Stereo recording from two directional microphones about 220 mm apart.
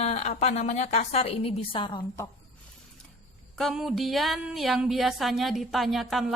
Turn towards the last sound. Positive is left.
turn(degrees=0)  # may be behind; listen again after turning